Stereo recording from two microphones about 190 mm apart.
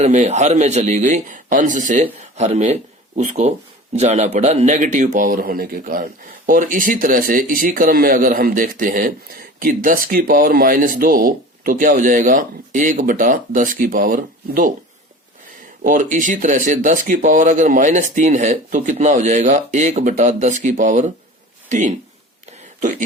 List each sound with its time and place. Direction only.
0.0 s speech: 35° right (ahead or behind)
15.8 s speech: 40° right (ahead or behind)